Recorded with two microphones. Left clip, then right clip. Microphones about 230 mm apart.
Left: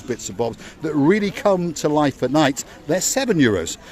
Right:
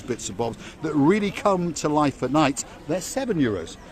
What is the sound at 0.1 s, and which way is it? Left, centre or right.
Speech, centre.